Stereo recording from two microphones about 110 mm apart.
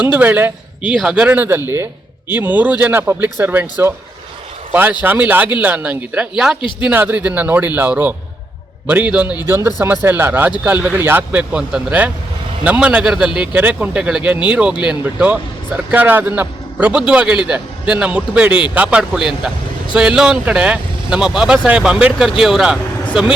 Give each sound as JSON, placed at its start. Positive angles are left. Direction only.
{"t": 0.0, "sound": "a man's voice", "side_deg": -15}